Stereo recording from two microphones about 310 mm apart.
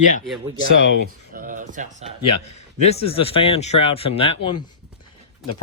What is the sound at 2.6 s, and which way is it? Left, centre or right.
Speech, centre.